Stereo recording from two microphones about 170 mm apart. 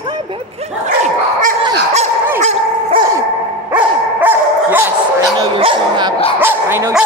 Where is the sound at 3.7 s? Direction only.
10° right (ahead or behind).